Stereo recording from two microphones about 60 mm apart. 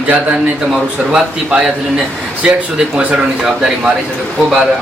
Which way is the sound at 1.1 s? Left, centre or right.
Centre.